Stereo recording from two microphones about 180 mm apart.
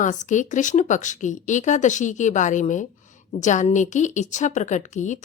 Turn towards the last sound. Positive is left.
turn(degrees=40)  # may be behind; listen again after turning